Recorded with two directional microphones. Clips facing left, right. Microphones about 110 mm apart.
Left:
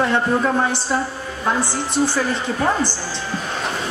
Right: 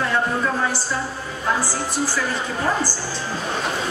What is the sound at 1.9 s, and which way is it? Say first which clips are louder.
Speech: left 7 dB; 20° left (ahead or behind).